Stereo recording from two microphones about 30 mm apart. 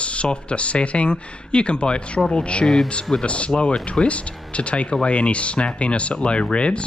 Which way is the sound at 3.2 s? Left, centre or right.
Left.